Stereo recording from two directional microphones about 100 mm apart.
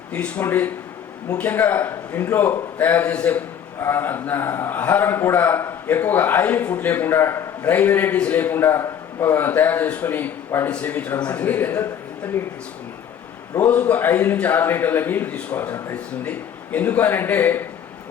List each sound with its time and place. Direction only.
0.1 s a man's voice: 15° left (ahead or behind)
13.6 s a man's voice: 15° left (ahead or behind)